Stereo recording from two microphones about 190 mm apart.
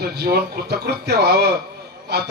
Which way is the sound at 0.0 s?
55° right (ahead or behind).